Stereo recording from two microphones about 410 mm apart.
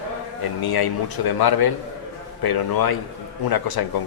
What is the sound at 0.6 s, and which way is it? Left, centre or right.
A man's voice, left.